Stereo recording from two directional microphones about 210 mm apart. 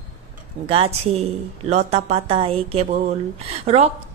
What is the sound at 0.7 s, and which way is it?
A woman's voice, 25° right (ahead or behind).